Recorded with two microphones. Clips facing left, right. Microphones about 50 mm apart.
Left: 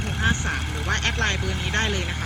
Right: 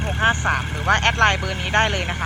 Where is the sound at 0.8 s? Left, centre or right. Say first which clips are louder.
Right 8 dB; right.